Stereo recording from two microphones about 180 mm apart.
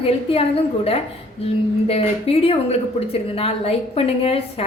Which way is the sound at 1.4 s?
35° left (ahead or behind).